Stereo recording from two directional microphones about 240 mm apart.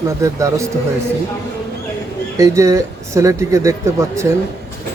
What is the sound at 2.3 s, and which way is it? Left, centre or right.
Speech, centre.